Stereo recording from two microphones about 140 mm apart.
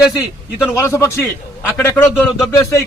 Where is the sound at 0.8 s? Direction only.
20° left (ahead or behind).